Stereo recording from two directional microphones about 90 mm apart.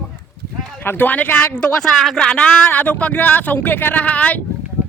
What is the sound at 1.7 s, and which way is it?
Speech, 5° left (ahead or behind).